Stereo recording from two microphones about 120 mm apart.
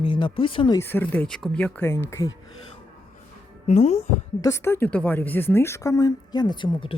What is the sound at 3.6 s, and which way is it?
Speech, 65° left (ahead or behind).